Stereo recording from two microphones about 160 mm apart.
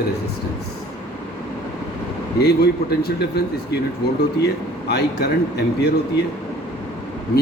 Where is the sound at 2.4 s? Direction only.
85° left.